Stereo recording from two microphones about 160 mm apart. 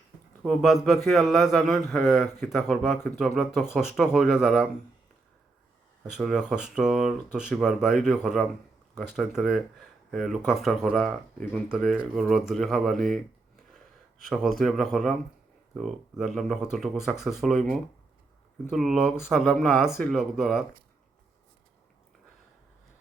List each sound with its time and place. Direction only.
0.4 s speech: centre (ahead or behind)
6.1 s speech: 5° right (ahead or behind)
14.3 s speech: centre (ahead or behind)